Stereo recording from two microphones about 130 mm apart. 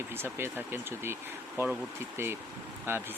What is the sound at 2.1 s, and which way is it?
Speech, 20° right (ahead or behind).